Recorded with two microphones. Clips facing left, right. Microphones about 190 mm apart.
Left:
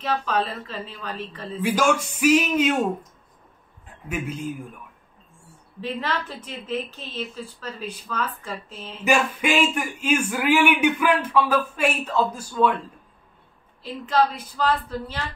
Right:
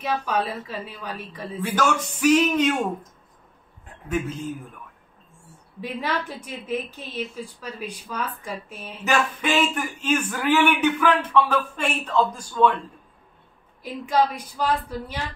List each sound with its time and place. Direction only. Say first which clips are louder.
0.0 s a woman's voice: even; 10° right (ahead or behind)
1.6 s speech: left 2 dB; 10° left (ahead or behind)
5.8 s a woman's voice: even; 10° right (ahead or behind)
9.0 s speech: left 2 dB; 10° left (ahead or behind)
13.8 s a woman's voice: even; 15° right (ahead or behind)